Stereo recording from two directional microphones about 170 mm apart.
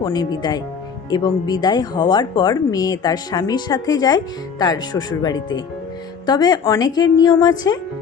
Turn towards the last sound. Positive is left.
turn(degrees=25)  # may be behind; listen again after turning